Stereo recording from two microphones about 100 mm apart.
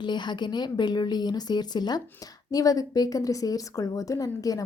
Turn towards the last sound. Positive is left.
turn(degrees=35)  # may be behind; listen again after turning